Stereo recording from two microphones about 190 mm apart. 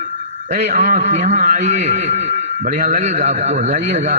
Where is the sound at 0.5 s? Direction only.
40° right (ahead or behind).